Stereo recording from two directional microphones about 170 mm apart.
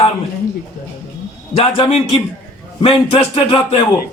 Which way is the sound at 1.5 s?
35° left (ahead or behind).